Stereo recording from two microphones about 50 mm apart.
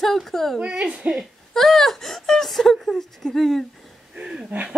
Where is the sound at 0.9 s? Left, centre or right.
Centre.